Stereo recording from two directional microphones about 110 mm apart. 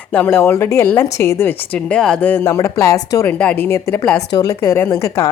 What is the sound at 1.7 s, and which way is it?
A woman's voice, 10° left (ahead or behind).